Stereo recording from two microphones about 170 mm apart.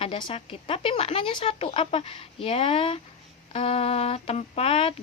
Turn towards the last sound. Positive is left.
turn(degrees=35)  # may be behind; listen again after turning